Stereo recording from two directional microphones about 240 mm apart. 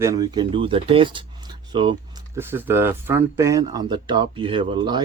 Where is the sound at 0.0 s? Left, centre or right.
Centre.